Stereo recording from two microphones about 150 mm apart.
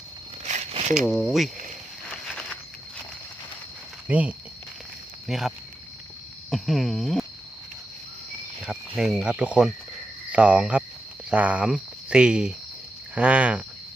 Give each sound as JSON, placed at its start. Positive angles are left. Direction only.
{"t": 0.4, "sound": "a sound", "side_deg": -50}
{"t": 0.9, "sound": "speech", "side_deg": 0}
{"t": 4.1, "sound": "speech", "side_deg": -10}
{"t": 8.6, "sound": "speech", "side_deg": 0}